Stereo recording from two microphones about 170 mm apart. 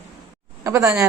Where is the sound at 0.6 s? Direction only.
20° right (ahead or behind).